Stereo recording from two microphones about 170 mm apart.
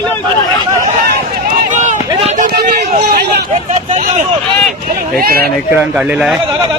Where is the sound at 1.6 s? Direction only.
45° right (ahead or behind).